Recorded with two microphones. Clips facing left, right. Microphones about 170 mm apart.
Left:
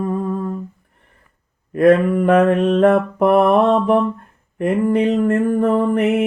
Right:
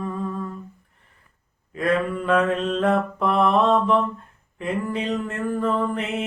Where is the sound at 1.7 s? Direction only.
60° left (ahead or behind).